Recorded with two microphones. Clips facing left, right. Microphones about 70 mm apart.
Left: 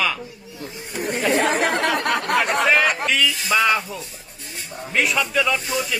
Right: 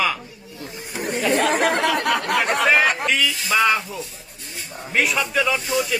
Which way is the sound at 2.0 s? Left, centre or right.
Left.